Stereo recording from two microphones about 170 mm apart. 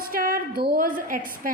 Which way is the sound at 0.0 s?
55° right (ahead or behind).